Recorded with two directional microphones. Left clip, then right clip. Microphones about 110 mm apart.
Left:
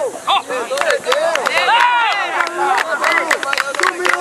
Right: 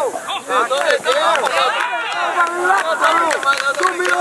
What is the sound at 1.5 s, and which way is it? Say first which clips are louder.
Run: left 4 dB; 25° left (ahead or behind).